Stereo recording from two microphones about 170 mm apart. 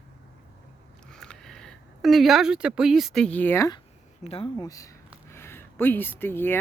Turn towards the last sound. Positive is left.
turn(degrees=15)  # may be behind; listen again after turning